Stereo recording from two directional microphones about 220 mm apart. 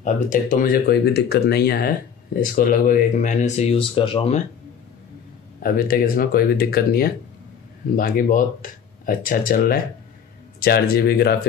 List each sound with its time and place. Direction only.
0.0 s speech: 35° left (ahead or behind)
5.6 s speech: 40° left (ahead or behind)